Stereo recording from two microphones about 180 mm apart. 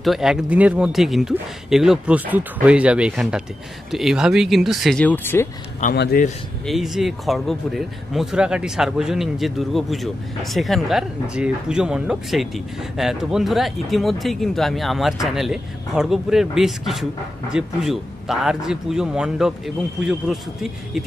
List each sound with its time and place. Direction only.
0.0 s speech: centre (ahead or behind)
5.8 s a man's voice: 45° left (ahead or behind)
6.6 s speech: centre (ahead or behind)